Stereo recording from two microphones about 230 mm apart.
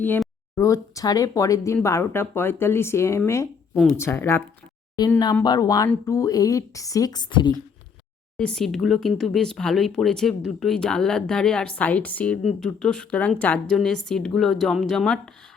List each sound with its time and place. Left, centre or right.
0.0 s speech: centre
8.4 s speech: centre